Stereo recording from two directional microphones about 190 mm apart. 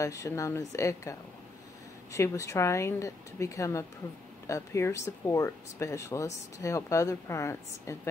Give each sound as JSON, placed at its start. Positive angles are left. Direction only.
{"t": 0.0, "sound": "speech", "side_deg": 15}
{"t": 2.1, "sound": "speech", "side_deg": 15}